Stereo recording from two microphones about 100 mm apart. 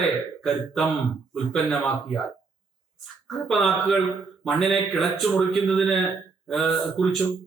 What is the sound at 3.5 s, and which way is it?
Speech, centre (ahead or behind).